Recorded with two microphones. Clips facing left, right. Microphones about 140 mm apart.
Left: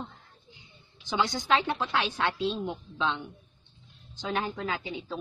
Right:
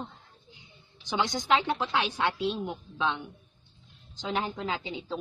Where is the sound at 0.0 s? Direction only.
15° right (ahead or behind).